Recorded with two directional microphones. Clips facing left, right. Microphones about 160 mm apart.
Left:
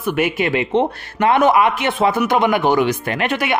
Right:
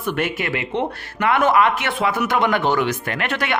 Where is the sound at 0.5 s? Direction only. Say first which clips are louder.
Left 6 dB; 25° left (ahead or behind).